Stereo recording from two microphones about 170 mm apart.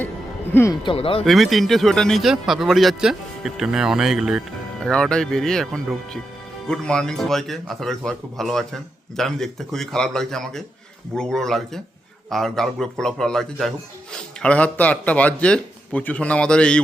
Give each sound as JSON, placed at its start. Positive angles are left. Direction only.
{"t": 0.5, "sound": "a man's voice", "side_deg": 15}
{"t": 0.9, "sound": "speech", "side_deg": 30}
{"t": 1.2, "sound": "a man's voice", "side_deg": 0}